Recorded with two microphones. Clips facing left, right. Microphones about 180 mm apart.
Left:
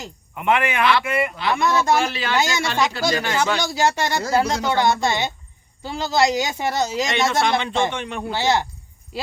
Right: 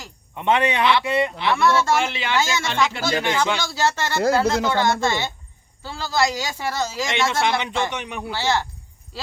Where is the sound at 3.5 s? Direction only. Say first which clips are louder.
Left 2 dB; 15° left (ahead or behind).